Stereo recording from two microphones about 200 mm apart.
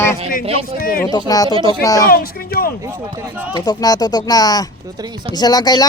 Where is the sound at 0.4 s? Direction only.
30° right (ahead or behind).